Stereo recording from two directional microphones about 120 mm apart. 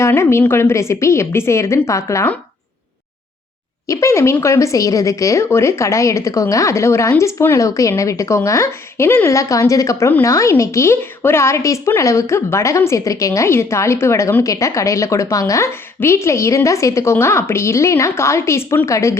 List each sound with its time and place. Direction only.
0.0 s a woman's voice: 20° left (ahead or behind)
3.8 s a woman's voice: 25° left (ahead or behind)